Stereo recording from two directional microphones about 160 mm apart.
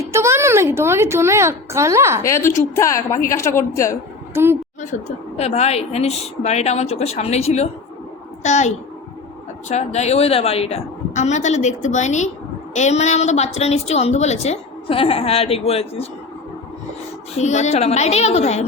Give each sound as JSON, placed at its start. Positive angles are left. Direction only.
{"t": 0.0, "sound": "speech", "side_deg": -15}
{"t": 2.2, "sound": "a woman's voice", "side_deg": 20}
{"t": 5.4, "sound": "a woman's voice", "side_deg": 40}
{"t": 17.3, "sound": "a woman's voice", "side_deg": 45}